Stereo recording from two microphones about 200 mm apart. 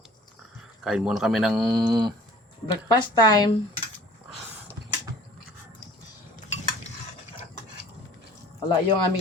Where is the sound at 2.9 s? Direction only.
20° left (ahead or behind).